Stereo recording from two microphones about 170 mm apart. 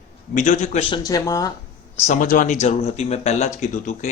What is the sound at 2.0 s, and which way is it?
Speech, 50° left (ahead or behind).